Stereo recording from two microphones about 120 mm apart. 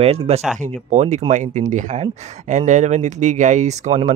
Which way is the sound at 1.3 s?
90° right.